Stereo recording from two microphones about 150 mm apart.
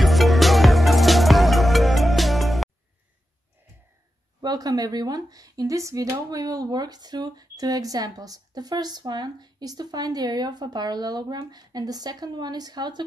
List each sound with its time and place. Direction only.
0.0 s music: centre (ahead or behind)
4.4 s speech: 25° right (ahead or behind)